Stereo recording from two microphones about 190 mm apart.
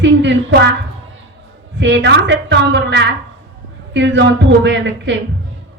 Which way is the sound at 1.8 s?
70° right (ahead or behind).